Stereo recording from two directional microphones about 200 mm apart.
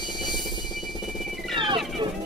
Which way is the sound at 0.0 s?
20° left (ahead or behind).